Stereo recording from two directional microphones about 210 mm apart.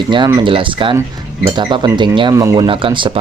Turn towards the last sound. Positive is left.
turn(degrees=-25)  # may be behind; listen again after turning